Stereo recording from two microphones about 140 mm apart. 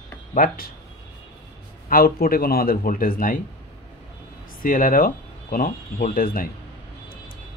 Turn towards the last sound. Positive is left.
turn(degrees=90)